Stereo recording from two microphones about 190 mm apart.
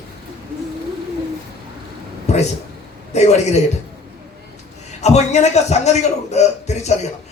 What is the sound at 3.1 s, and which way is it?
Speech, 35° left (ahead or behind).